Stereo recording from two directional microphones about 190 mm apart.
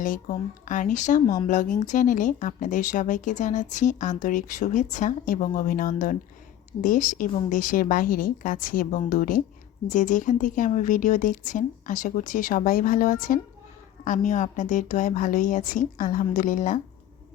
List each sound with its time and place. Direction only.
0.0 s speech: 45° left (ahead or behind)